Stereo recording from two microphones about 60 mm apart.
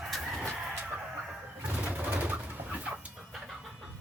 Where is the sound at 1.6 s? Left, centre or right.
Centre.